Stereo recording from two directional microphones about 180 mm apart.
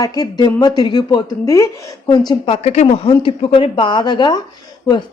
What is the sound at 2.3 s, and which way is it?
A woman's voice, 35° left (ahead or behind).